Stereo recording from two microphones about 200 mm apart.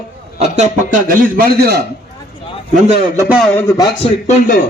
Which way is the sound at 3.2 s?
10° right (ahead or behind).